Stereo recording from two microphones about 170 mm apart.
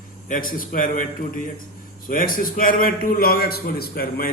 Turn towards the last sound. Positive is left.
turn(degrees=60)  # may be behind; listen again after turning